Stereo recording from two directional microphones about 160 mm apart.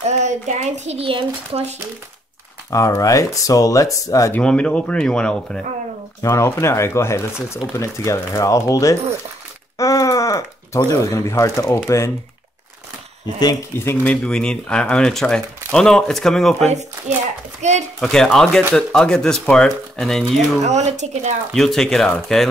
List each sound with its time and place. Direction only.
0.0 s speech: 45° right (ahead or behind)
2.7 s speech: 20° left (ahead or behind)
4.4 s speech: 5° left (ahead or behind)
6.2 s speech: 15° left (ahead or behind)
9.8 s a sound: 20° left (ahead or behind)
13.4 s speech: 25° left (ahead or behind)
13.8 s speech: 5° left (ahead or behind)
17.6 s speech: 45° right (ahead or behind)
18.0 s speech: 5° left (ahead or behind)
20.6 s speech: 45° right (ahead or behind)
21.5 s speech: centre (ahead or behind)